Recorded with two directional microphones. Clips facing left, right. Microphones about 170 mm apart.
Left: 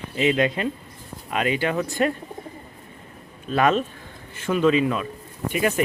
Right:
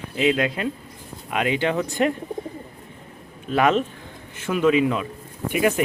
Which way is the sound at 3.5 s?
15° right (ahead or behind).